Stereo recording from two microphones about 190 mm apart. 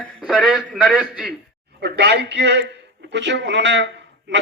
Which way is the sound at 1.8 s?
60° right (ahead or behind).